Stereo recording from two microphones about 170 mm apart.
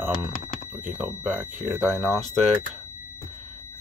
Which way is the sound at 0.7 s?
10° right (ahead or behind).